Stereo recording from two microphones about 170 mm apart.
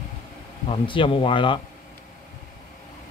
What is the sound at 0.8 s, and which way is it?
Speech, 30° left (ahead or behind).